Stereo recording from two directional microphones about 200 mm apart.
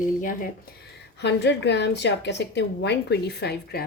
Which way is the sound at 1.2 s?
60° left (ahead or behind).